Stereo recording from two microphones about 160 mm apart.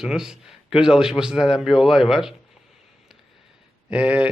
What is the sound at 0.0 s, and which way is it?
A man's voice, 5° right (ahead or behind).